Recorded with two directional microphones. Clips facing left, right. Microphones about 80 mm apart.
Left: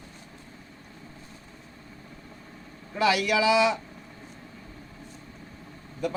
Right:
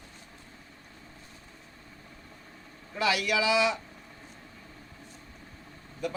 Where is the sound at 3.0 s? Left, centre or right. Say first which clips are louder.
Left 4 dB; left.